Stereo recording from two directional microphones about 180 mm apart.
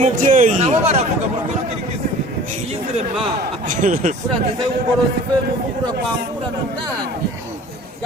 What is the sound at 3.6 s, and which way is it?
Speech, 45° right (ahead or behind).